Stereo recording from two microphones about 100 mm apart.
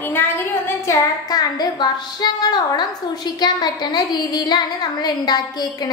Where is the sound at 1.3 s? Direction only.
45° left (ahead or behind).